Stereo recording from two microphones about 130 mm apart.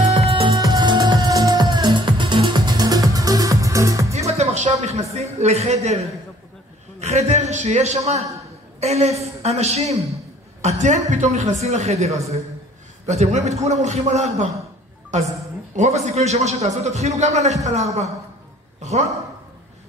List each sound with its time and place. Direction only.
0.0 s music: 55° right (ahead or behind)
0.6 s music: 30° right (ahead or behind)
4.3 s music: 55° right (ahead or behind)
4.7 s a sound: 60° right (ahead or behind)
7.0 s a man's voice: 60° right (ahead or behind)
18.8 s a woman's voice: 60° right (ahead or behind)